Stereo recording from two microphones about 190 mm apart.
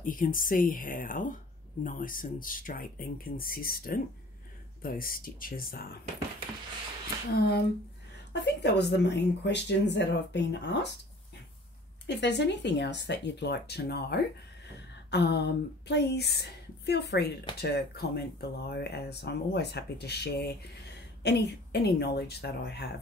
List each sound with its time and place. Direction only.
0.0 s speech: 45° left (ahead or behind)
7.3 s speech: 60° left (ahead or behind)
12.1 s a woman's voice: 65° left (ahead or behind)